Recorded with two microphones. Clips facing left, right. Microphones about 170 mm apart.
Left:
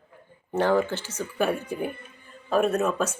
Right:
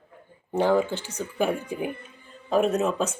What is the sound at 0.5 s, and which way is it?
Speech, 15° right (ahead or behind).